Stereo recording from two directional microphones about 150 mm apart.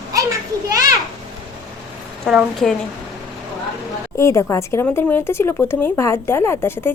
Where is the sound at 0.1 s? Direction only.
20° right (ahead or behind).